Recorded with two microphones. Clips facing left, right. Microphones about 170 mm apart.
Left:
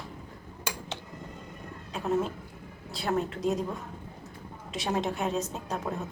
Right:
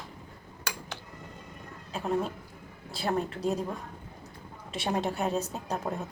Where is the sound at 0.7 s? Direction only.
25° left (ahead or behind).